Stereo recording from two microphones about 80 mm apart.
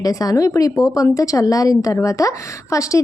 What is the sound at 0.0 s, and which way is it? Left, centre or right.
A woman's voice, left.